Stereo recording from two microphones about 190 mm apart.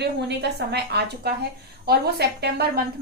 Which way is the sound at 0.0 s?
60° right (ahead or behind).